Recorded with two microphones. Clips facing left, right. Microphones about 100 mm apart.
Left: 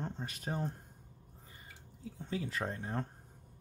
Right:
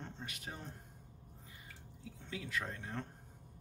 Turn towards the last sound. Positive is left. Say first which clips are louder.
# left 4 dB
turn(degrees=35)  # may be behind; listen again after turning